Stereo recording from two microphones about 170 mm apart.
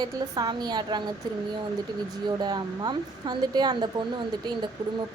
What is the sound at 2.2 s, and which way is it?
A woman's voice, 25° right (ahead or behind).